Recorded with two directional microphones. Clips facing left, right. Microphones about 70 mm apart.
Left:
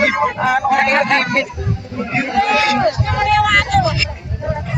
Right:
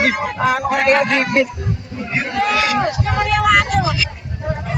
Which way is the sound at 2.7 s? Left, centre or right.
Centre.